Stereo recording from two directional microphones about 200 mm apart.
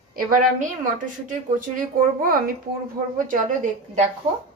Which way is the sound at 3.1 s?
40° right (ahead or behind).